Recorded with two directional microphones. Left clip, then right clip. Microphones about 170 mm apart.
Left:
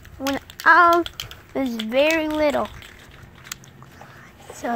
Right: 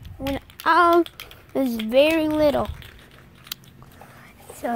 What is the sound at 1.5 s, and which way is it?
Speech, 40° right (ahead or behind).